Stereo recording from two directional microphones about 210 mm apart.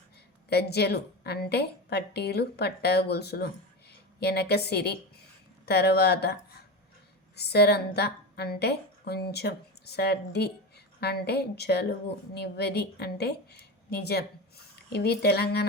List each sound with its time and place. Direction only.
0.5 s a woman's voice: 50° left (ahead or behind)
7.3 s a woman's voice: 50° left (ahead or behind)